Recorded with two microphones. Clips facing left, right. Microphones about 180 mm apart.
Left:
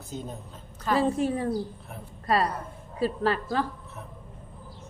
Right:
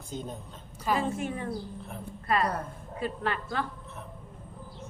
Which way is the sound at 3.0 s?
35° left (ahead or behind).